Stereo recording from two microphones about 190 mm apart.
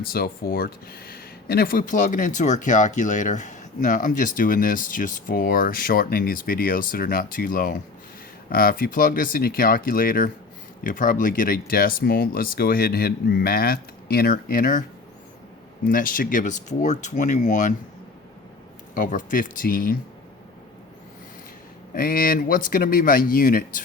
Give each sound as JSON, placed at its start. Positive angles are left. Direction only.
{"t": 0.0, "sound": "speech", "side_deg": 50}
{"t": 15.9, "sound": "speech", "side_deg": 45}
{"t": 18.9, "sound": "speech", "side_deg": 45}
{"t": 21.9, "sound": "speech", "side_deg": 50}